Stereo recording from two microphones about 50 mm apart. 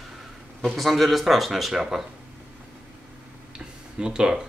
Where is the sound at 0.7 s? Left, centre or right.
Centre.